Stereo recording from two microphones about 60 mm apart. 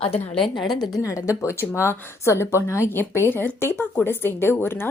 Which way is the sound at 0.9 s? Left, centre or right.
Left.